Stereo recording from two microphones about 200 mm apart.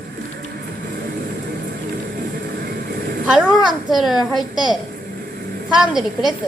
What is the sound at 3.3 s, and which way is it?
A woman's voice, 5° right (ahead or behind).